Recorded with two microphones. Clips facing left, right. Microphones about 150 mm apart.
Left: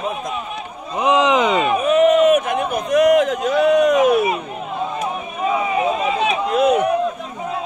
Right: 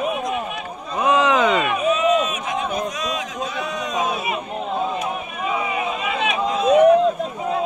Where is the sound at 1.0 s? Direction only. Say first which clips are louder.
Left 2 dB; 20° left (ahead or behind).